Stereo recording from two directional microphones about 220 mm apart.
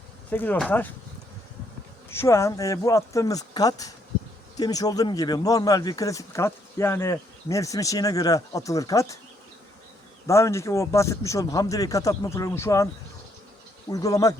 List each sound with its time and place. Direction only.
0.3 s speech: 10° left (ahead or behind)
2.0 s speech: 10° left (ahead or behind)
10.2 s speech: 15° left (ahead or behind)
13.9 s speech: 15° left (ahead or behind)